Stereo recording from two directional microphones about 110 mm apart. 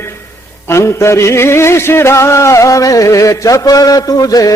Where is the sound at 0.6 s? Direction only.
25° left (ahead or behind).